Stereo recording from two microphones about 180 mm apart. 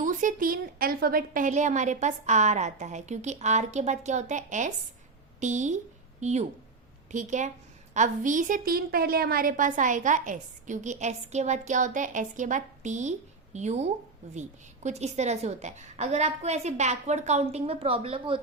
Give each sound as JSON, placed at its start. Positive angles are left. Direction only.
{"t": 0.0, "sound": "a woman's voice", "side_deg": -45}